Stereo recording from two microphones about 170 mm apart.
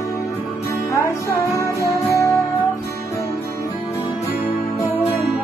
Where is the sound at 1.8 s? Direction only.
20° left (ahead or behind).